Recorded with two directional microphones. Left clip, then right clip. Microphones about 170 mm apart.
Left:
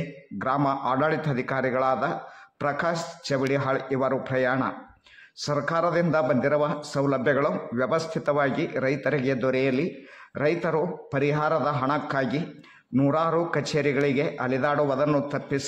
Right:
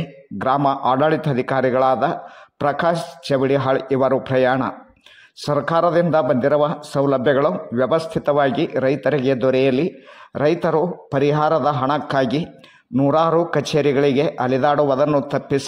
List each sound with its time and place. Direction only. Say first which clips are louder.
0.4 s a man's voice: right 7 dB; 30° right (ahead or behind)